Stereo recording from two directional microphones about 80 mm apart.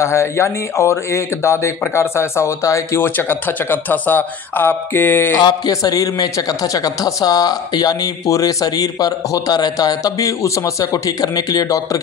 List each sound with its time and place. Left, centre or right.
0.0 s speech: left
3.0 s speech: left
5.4 s a man's voice: left